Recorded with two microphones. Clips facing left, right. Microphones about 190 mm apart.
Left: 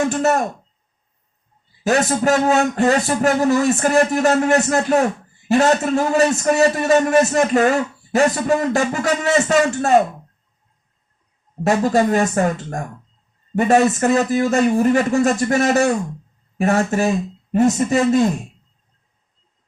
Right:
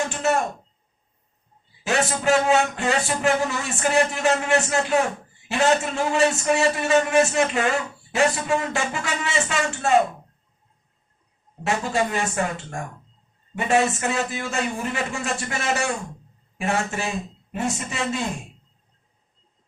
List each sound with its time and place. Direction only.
0.1 s a man's voice: 40° left (ahead or behind)
1.8 s a man's voice: 40° left (ahead or behind)
11.6 s a man's voice: 40° left (ahead or behind)